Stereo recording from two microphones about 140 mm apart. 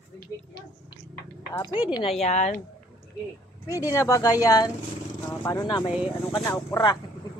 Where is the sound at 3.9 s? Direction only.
20° left (ahead or behind).